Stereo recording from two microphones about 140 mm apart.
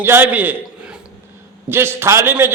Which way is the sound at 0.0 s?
15° right (ahead or behind).